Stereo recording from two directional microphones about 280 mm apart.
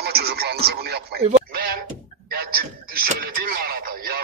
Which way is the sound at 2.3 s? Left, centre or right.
Right.